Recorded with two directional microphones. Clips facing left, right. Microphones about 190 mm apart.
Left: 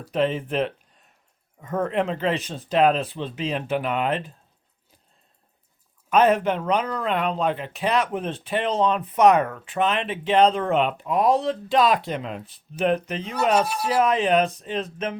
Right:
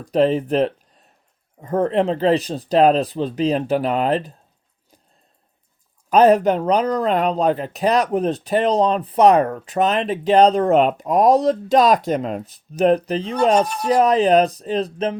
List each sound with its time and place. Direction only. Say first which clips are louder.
0.1 s speech: right 7 dB; 40° right (ahead or behind)
6.1 s speech: right 5 dB; 35° right (ahead or behind)
13.6 s speech: right 4 dB; 5° left (ahead or behind)
13.9 s speech: right 6 dB; 35° right (ahead or behind)